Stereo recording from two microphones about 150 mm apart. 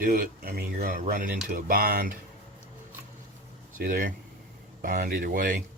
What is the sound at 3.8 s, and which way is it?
Speech, 70° right (ahead or behind).